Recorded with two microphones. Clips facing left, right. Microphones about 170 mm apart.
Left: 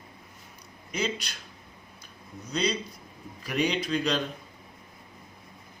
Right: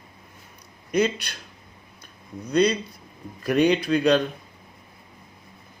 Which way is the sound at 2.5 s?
60° right (ahead or behind).